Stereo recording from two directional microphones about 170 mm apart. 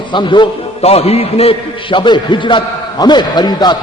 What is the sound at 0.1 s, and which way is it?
A man's voice, 25° left (ahead or behind).